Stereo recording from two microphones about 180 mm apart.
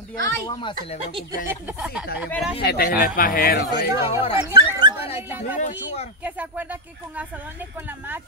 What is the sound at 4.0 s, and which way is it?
Speech, 30° left (ahead or behind).